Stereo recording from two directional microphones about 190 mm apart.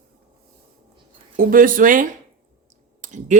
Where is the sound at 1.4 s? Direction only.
45° right (ahead or behind).